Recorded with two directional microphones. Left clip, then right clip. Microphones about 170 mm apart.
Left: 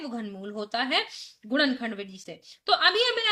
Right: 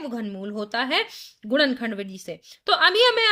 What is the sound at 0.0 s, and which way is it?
A woman's voice, 40° right (ahead or behind).